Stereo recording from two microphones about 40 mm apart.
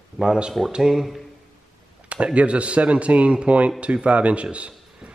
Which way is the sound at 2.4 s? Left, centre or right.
Right.